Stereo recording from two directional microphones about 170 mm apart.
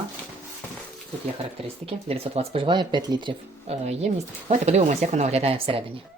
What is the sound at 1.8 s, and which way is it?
Speech, 35° right (ahead or behind).